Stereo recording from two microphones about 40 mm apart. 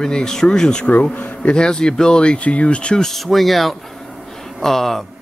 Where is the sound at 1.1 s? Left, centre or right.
Left.